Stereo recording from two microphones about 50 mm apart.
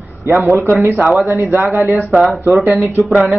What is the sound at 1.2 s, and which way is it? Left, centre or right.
Speech, right.